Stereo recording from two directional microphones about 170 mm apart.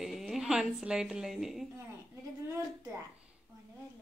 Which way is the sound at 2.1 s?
15° right (ahead or behind).